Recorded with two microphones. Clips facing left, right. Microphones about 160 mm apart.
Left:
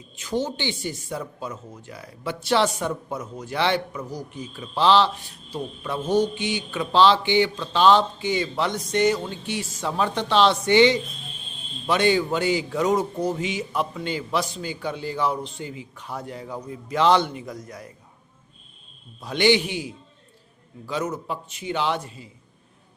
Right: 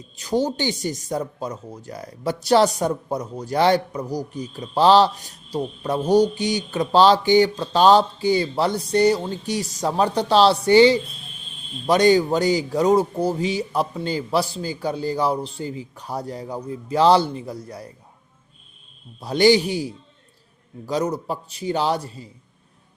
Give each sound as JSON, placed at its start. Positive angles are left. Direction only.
{"t": 0.2, "sound": "speech", "side_deg": -35}
{"t": 19.2, "sound": "speech", "side_deg": -35}